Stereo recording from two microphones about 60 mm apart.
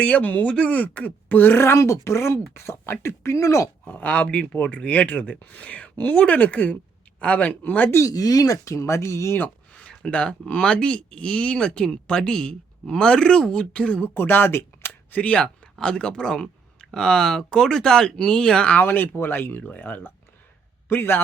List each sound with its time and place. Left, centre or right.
0.0 s speech: left
3.8 s speech: left
8.0 s speech: left
9.7 s speech: centre
14.1 s speech: left
15.1 s speech: left
18.7 s a man's voice: left